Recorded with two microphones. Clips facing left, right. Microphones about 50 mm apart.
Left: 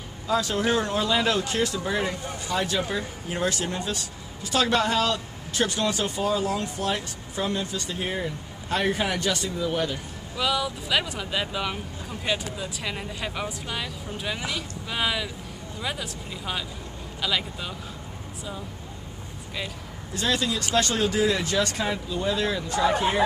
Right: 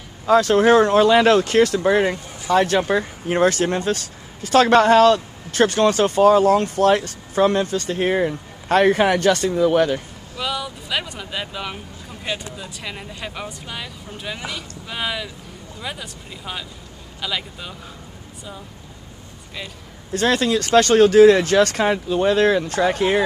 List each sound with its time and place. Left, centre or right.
0.3 s speech: right
10.3 s speech: centre
20.2 s speech: right